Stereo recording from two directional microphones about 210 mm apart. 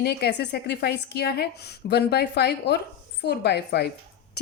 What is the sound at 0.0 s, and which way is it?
A woman's voice, 50° left (ahead or behind).